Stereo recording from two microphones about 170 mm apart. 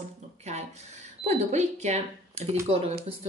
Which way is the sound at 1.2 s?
45° right (ahead or behind).